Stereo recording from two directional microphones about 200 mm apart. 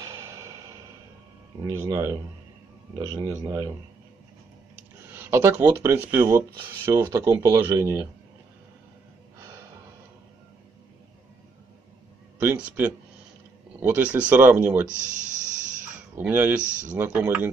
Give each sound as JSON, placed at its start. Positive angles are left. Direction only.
{"t": 0.0, "sound": "music", "side_deg": -15}
{"t": 1.6, "sound": "speech", "side_deg": -15}
{"t": 5.2, "sound": "speech", "side_deg": -10}
{"t": 12.4, "sound": "speech", "side_deg": -10}
{"t": 15.0, "sound": "speech", "side_deg": -40}
{"t": 16.2, "sound": "speech", "side_deg": -10}